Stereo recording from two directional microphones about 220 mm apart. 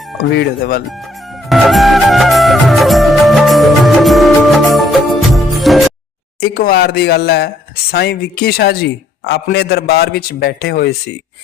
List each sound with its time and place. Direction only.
0.2 s speech: 45° left (ahead or behind)
0.9 s music: centre (ahead or behind)
6.4 s speech: 40° left (ahead or behind)